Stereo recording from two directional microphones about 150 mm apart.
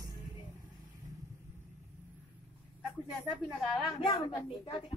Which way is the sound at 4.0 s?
30° left (ahead or behind).